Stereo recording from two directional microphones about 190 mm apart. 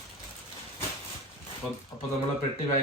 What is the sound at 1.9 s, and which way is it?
Speech, 15° left (ahead or behind).